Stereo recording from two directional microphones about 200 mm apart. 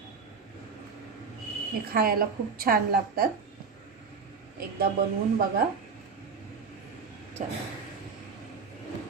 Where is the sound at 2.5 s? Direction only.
45° right (ahead or behind).